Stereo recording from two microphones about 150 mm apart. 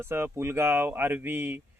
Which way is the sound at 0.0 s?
15° right (ahead or behind).